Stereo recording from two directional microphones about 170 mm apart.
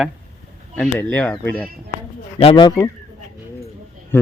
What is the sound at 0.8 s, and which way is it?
Speech, 10° left (ahead or behind).